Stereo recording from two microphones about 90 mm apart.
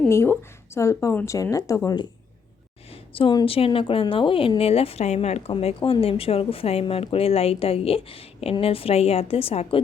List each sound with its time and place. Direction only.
0.1 s speech: 30° left (ahead or behind)
2.9 s a sound: 85° left
3.4 s a woman's voice: 90° left